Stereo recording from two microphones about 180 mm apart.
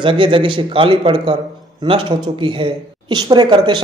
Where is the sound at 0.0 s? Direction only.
30° right (ahead or behind).